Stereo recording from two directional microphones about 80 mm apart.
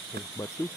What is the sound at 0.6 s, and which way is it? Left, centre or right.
Ratchet, left.